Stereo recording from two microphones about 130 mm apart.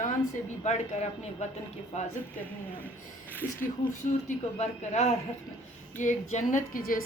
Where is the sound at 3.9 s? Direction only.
70° left (ahead or behind).